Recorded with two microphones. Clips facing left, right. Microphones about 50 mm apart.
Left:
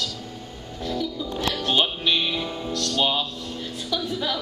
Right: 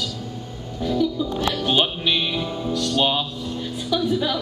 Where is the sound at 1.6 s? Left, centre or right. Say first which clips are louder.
Even; centre.